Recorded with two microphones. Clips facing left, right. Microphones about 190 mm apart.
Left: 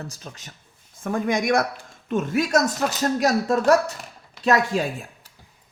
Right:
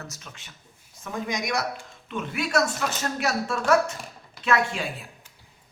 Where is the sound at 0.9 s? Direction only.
55° left (ahead or behind).